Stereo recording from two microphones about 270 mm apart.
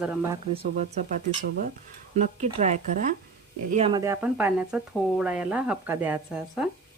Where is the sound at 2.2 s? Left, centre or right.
Right; by 6.6 s centre.